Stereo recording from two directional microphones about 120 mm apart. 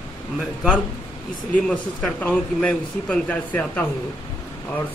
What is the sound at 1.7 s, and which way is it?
Speech, 10° left (ahead or behind).